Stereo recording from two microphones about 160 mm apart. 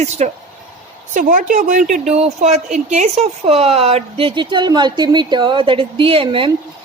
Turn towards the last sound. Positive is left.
turn(degrees=-35)  # may be behind; listen again after turning